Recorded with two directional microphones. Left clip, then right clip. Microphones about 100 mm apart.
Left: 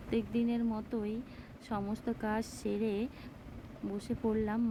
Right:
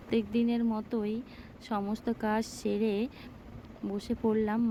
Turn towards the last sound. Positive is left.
turn(degrees=-45)  # may be behind; listen again after turning